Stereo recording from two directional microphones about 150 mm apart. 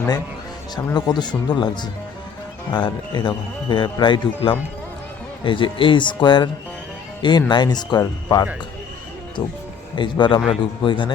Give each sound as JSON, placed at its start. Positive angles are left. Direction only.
{"t": 0.9, "sound": "speech", "side_deg": 30}